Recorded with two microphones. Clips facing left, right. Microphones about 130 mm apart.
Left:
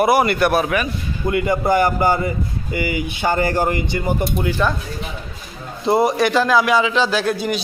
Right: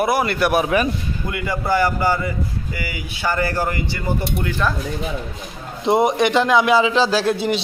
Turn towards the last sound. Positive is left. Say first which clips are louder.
# right 1 dB
turn(degrees=-25)  # may be behind; listen again after turning